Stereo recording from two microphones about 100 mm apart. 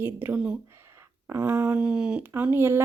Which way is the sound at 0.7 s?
25° right (ahead or behind).